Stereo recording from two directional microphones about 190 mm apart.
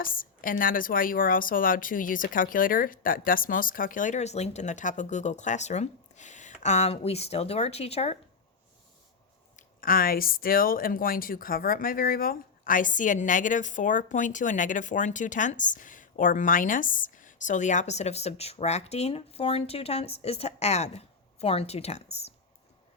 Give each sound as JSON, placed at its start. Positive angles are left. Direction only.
{"t": 0.0, "sound": "a woman's voice", "side_deg": 45}
{"t": 9.6, "sound": "speech", "side_deg": 50}